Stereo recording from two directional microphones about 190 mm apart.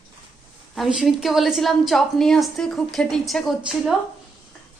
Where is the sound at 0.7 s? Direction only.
Centre (ahead or behind).